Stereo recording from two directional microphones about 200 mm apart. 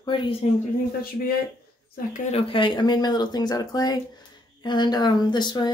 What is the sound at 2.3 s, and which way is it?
Speech, 25° left (ahead or behind).